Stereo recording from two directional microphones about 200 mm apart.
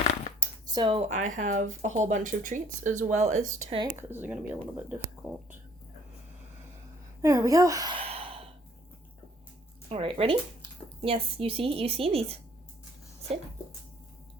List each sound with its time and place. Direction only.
0.3 s speech: 20° right (ahead or behind); by 3.8 s 40° right (ahead or behind)
3.8 s speech: 20° right (ahead or behind)
4.2 s speech: 10° right (ahead or behind)
7.2 s sigh: 15° right (ahead or behind)
9.9 s speech: 30° right (ahead or behind)